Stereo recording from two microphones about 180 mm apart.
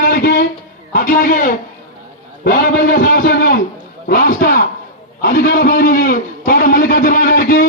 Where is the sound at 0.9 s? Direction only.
50° left (ahead or behind).